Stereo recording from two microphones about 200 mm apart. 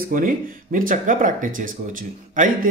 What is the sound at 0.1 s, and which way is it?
Speech, 40° right (ahead or behind).